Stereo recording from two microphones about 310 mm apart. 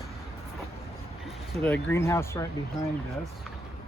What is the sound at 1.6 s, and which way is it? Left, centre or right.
Speech, centre.